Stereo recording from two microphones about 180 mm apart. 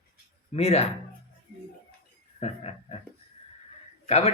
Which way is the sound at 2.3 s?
35° left (ahead or behind).